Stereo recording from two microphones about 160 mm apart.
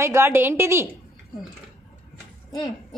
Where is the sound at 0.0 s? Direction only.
15° right (ahead or behind).